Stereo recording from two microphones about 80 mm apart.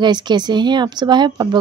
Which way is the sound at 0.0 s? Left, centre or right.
Right.